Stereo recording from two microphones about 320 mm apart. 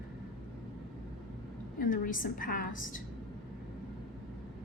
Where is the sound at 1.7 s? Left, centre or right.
Left.